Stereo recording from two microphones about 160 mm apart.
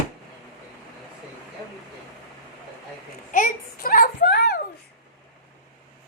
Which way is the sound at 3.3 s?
60° left (ahead or behind).